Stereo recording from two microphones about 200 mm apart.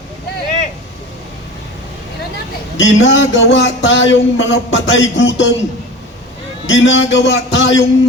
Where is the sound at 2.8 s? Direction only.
70° left (ahead or behind).